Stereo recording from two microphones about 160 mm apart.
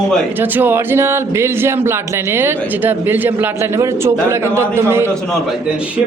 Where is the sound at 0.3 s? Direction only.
10° right (ahead or behind).